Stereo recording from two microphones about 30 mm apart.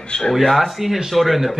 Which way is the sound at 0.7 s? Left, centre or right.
Centre.